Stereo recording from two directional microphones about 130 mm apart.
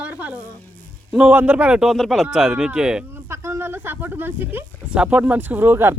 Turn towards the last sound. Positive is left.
turn(degrees=-15)  # may be behind; listen again after turning